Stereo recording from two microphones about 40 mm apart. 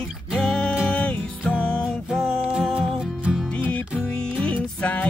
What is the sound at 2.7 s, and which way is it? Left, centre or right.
Music, centre.